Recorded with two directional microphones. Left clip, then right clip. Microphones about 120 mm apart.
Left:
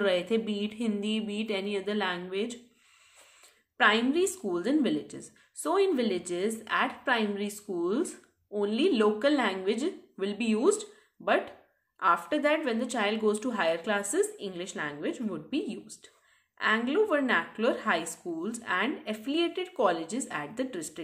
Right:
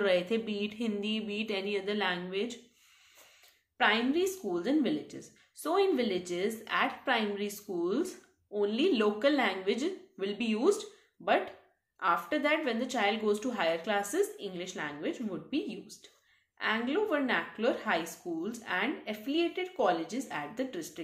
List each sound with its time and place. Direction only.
0.0 s speech: 25° left (ahead or behind)
3.7 s a woman's voice: 45° left (ahead or behind)